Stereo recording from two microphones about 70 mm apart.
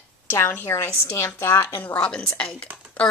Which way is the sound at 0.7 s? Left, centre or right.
Left.